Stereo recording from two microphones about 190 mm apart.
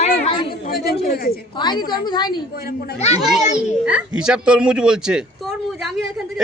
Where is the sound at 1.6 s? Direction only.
25° left (ahead or behind).